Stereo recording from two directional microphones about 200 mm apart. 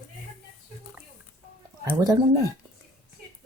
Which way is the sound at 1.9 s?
20° right (ahead or behind).